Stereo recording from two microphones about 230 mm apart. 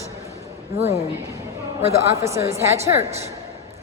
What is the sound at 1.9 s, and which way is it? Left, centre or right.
A woman's voice, centre.